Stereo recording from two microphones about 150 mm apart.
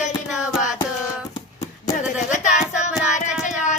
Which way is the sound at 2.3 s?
55° left (ahead or behind).